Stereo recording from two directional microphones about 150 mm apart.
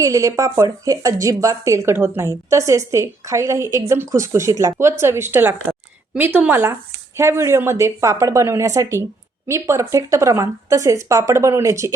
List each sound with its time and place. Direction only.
0.0 s a woman's voice: 20° right (ahead or behind)